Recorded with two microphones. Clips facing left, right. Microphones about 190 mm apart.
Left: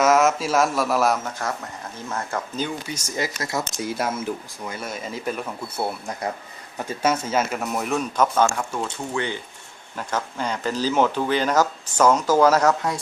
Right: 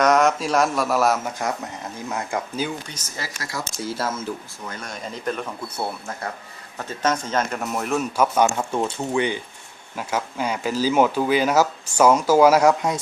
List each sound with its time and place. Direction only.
0.0 s a man's voice: 5° left (ahead or behind)
1.2 s speech: 15° right (ahead or behind)
2.8 s speech: 10° left (ahead or behind); by 13.0 s 15° right (ahead or behind)